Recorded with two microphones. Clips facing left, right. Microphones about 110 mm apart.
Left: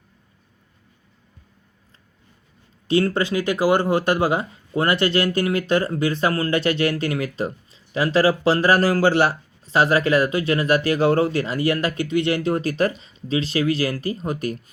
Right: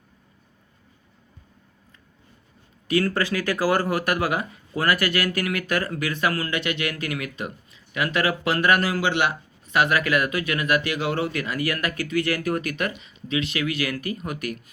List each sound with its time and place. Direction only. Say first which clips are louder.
2.8 s speech: left 3 dB; 30° left (ahead or behind)